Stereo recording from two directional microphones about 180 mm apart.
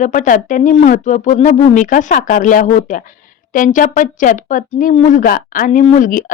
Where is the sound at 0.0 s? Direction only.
45° left (ahead or behind).